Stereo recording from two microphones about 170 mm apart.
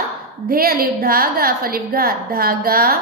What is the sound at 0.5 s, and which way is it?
A woman's voice, 60° right (ahead or behind).